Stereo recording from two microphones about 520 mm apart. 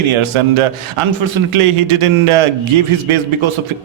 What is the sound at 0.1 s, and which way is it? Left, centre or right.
A man's voice, right.